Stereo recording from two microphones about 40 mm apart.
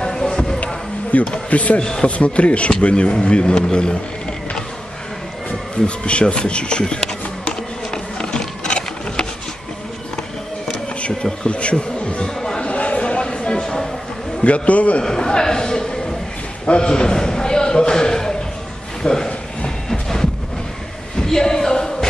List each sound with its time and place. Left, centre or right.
0.0 s music: centre
1.1 s speech: left
5.9 s speech: left
7.9 s a sound: centre
10.7 s insect: left
11.4 s speech: left
12.5 s a sound: left; by 13.8 s centre
14.4 s speech: left
15.0 s a man's voice: centre
16.6 s a sound: left